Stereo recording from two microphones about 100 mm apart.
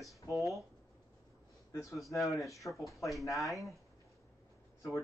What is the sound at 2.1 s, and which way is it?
Speech, centre (ahead or behind).